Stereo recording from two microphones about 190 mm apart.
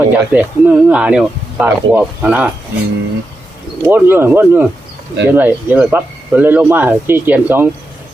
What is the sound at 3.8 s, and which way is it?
Speech, 10° right (ahead or behind).